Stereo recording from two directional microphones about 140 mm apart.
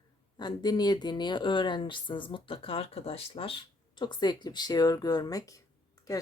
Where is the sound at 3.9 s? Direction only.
30° left (ahead or behind).